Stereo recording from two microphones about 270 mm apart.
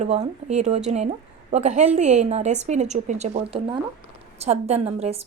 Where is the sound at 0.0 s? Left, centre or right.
Right.